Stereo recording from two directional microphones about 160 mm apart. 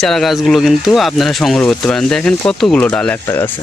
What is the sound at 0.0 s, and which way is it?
Speech, centre (ahead or behind).